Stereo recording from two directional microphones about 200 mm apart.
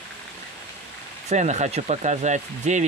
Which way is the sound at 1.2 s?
35° right (ahead or behind).